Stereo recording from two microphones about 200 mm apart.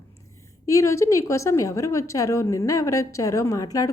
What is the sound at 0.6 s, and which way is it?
A woman's voice, 15° left (ahead or behind).